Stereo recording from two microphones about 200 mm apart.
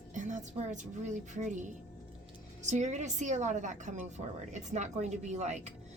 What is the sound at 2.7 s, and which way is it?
A woman's voice, 35° right (ahead or behind).